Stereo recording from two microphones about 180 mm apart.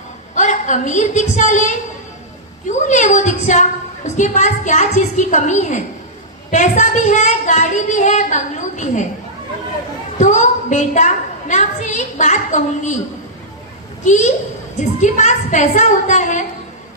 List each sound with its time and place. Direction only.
0.3 s a woman's voice: 40° left (ahead or behind)
10.2 s a woman's voice: 40° left (ahead or behind)
14.0 s a child's voice: 40° left (ahead or behind)